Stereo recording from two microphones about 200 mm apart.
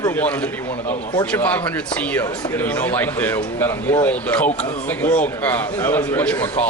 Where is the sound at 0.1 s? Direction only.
5° left (ahead or behind).